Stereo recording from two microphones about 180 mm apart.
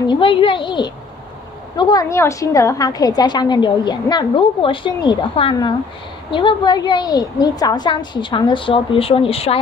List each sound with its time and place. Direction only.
0.0 s a woman's voice: 25° left (ahead or behind)